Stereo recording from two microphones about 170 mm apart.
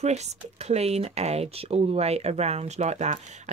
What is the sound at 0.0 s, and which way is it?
Speech, 40° right (ahead or behind).